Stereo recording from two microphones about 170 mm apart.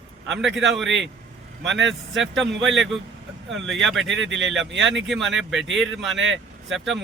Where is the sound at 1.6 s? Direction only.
90° right.